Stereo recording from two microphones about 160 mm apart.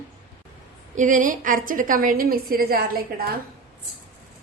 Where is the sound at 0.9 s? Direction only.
55° right (ahead or behind); by 3.3 s 70° right (ahead or behind).